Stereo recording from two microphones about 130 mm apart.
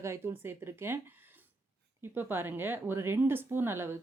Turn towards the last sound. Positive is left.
turn(degrees=-15)  # may be behind; listen again after turning